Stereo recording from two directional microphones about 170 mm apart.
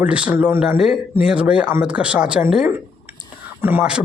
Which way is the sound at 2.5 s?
5° right (ahead or behind).